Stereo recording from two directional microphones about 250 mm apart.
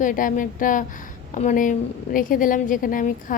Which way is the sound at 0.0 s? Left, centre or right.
Left.